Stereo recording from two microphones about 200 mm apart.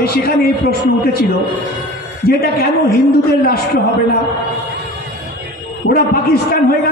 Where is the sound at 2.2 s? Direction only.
50° left (ahead or behind).